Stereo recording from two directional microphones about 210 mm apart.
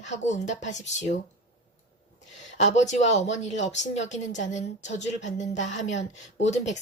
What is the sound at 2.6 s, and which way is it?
A woman's voice, 35° left (ahead or behind).